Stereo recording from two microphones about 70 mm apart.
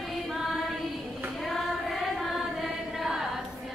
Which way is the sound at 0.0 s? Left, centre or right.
Centre.